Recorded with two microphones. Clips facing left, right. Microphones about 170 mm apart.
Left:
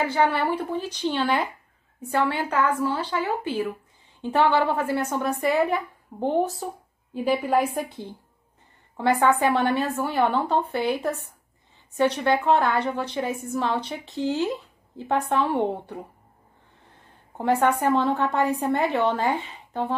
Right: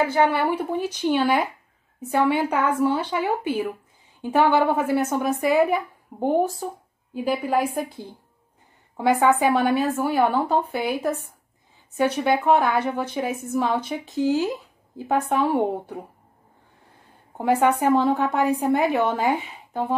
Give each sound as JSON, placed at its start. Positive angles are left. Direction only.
{"t": 0.0, "sound": "a woman's voice", "side_deg": -10}
{"t": 8.9, "sound": "a woman's voice", "side_deg": -10}
{"t": 17.4, "sound": "a woman's voice", "side_deg": -10}